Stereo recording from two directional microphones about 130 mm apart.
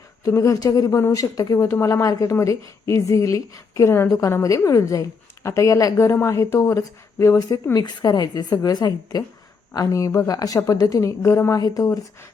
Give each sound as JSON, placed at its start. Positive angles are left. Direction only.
{"t": 0.3, "sound": "a woman's voice", "side_deg": 25}